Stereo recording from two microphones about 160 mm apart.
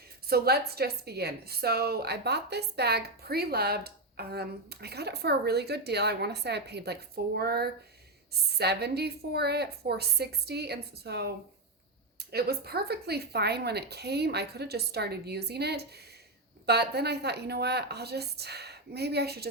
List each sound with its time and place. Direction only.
0.3 s a woman's voice: 75° right (ahead or behind)
12.3 s a woman's voice: 75° right (ahead or behind)